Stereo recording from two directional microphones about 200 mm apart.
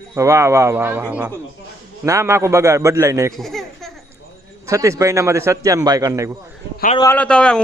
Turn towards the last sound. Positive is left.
turn(degrees=5)  # may be behind; listen again after turning